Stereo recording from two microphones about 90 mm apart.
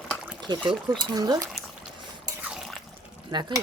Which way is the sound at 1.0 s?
45° right (ahead or behind).